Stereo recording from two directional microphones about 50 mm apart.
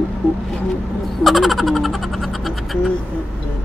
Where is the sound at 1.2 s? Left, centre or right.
Centre.